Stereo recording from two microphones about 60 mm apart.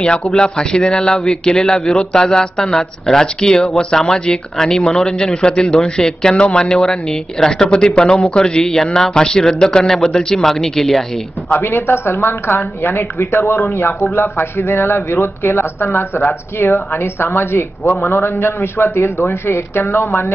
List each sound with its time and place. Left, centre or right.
0.2 s speech: centre
11.5 s a man's voice: left
13.4 s a man's voice: left